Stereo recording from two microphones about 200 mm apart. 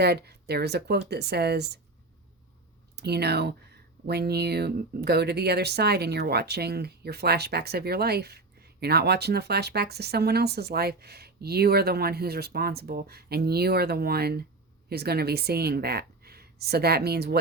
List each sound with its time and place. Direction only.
0.0 s speech: 55° right (ahead or behind)
2.9 s a woman's voice: 55° right (ahead or behind)